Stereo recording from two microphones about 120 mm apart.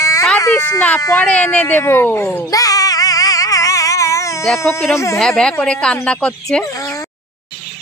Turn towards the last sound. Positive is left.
turn(degrees=25)  # may be behind; listen again after turning